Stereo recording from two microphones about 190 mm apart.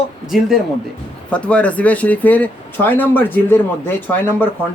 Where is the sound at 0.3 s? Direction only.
Centre (ahead or behind).